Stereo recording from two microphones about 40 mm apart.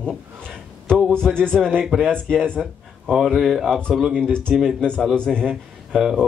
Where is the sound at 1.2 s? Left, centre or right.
Left.